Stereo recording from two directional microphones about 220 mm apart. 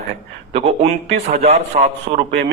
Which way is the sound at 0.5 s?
30° right (ahead or behind).